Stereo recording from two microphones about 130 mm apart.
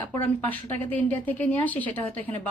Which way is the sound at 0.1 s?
15° left (ahead or behind).